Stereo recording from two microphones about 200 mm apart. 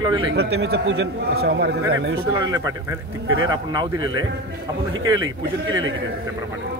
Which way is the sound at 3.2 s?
90° right.